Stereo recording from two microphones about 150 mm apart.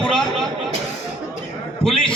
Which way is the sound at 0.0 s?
Centre (ahead or behind).